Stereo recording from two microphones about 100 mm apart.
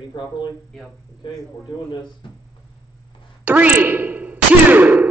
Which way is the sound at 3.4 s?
15° right (ahead or behind).